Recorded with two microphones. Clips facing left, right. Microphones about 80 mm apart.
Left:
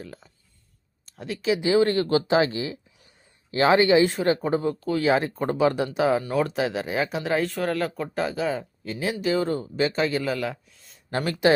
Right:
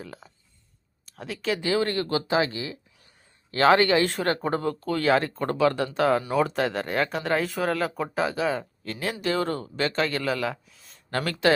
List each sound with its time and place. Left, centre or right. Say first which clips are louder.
0.0 s a sound: even; centre
1.0 s speech: left 4 dB; centre
1.6 s speech: left 5 dB; left
3.5 s speech: left 1 dB; centre
11.1 s speech: left 2 dB; centre